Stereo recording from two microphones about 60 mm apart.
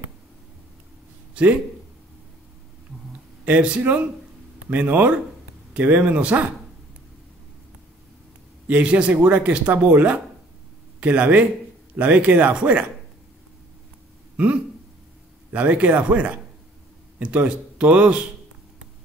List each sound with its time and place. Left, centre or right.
1.3 s speech: right
3.4 s speech: right
8.6 s speech: right
14.3 s a sound: right
15.5 s speech: right